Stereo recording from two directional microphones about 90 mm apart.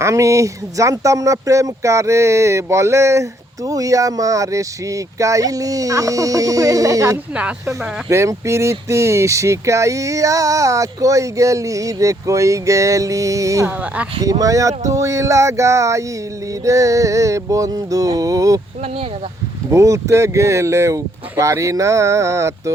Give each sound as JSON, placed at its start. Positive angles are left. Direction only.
{"t": 0.0, "sound": "speech", "side_deg": -35}
{"t": 13.7, "sound": "speech", "side_deg": -15}
{"t": 14.2, "sound": "speech", "side_deg": -40}
{"t": 19.7, "sound": "speech", "side_deg": -35}